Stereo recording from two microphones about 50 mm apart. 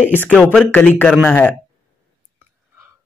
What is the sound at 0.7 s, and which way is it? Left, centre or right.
Speech, left.